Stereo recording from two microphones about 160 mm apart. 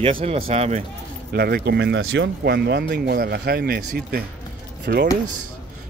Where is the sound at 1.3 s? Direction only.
75° right (ahead or behind).